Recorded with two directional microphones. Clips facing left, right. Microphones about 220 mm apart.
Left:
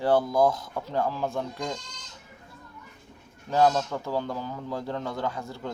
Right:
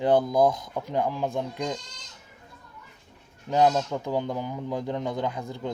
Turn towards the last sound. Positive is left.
turn(degrees=-15)  # may be behind; listen again after turning